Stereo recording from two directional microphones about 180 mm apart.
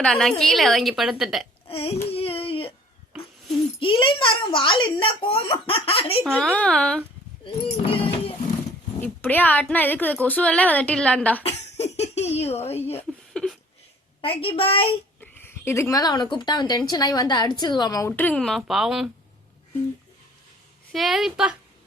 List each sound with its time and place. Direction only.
0.0 s a woman's voice: 5° left (ahead or behind)
1.6 s a sound: 35° left (ahead or behind)
3.1 s cat: centre (ahead or behind)
3.8 s a woman's voice: 30° left (ahead or behind)
6.2 s a woman's voice: 5° left (ahead or behind)
7.4 s speech: 30° left (ahead or behind)
9.0 s a woman's voice: 10° left (ahead or behind)
11.4 s speech: 35° left (ahead or behind)
13.0 s a sound: 5° left (ahead or behind)
14.2 s a woman's voice: 30° left (ahead or behind)
15.2 s a woman's voice: 10° left (ahead or behind)
20.9 s a woman's voice: centre (ahead or behind)